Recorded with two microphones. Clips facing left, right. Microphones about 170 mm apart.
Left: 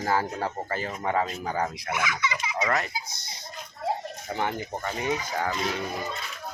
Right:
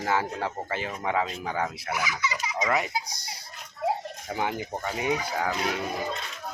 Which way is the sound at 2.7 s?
10° right (ahead or behind).